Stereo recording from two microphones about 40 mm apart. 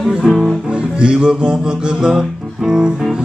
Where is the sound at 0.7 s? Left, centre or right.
Right.